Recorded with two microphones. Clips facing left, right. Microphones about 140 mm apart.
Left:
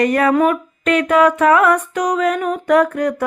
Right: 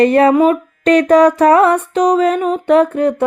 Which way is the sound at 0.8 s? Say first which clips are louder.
Right 5 dB; 35° right (ahead or behind).